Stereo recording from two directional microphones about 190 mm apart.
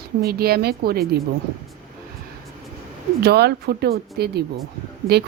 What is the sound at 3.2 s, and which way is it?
Speech, 60° right (ahead or behind).